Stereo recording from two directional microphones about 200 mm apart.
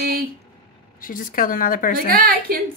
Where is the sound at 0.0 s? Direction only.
50° right (ahead or behind).